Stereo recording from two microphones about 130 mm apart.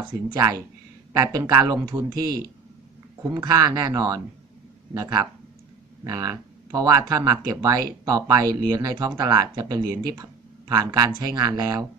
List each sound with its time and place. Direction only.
1.1 s speech: 25° right (ahead or behind)